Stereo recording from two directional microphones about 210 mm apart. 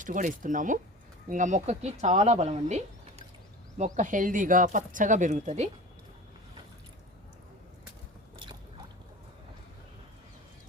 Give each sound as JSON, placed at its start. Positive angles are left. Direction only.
{"t": 0.0, "sound": "speech", "side_deg": -40}